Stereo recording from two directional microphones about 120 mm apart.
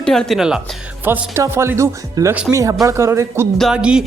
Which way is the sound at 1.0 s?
20° right (ahead or behind).